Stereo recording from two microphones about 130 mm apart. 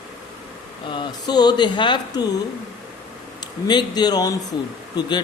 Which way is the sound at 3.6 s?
35° left (ahead or behind).